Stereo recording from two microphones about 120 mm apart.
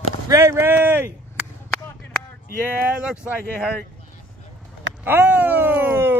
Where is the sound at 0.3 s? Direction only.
25° right (ahead or behind).